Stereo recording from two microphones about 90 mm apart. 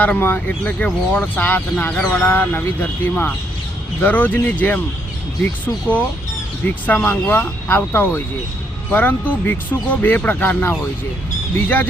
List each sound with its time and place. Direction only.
0.0 s speech: 20° left (ahead or behind)
6.8 s speech: 20° left (ahead or behind)